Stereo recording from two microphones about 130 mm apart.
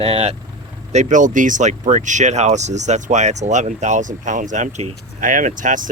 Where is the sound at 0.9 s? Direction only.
65° right (ahead or behind).